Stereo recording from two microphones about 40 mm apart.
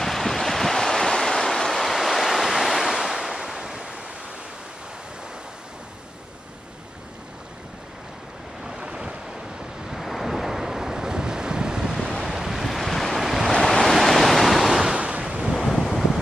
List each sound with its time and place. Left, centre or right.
0.0 s waves: centre
8.6 s waves: right
9.8 s waves: centre
12.6 s waves: centre
13.6 s waves: centre
14.9 s a sound: right
15.5 s wind noise: centre